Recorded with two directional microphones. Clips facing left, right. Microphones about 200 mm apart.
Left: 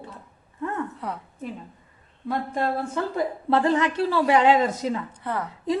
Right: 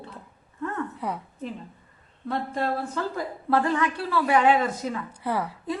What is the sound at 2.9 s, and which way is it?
A woman's voice, 20° left (ahead or behind).